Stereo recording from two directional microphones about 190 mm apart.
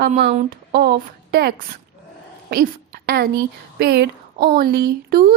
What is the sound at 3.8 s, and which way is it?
A woman's voice, 60° right (ahead or behind).